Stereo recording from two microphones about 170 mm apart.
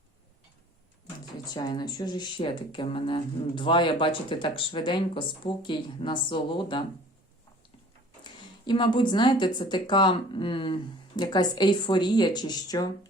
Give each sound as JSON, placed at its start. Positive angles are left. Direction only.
{"t": 1.5, "sound": "speech", "side_deg": 25}
{"t": 8.2, "sound": "speech", "side_deg": 25}